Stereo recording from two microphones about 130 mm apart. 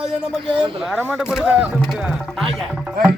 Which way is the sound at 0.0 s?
5° right (ahead or behind).